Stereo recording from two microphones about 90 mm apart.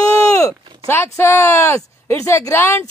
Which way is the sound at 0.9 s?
25° left (ahead or behind).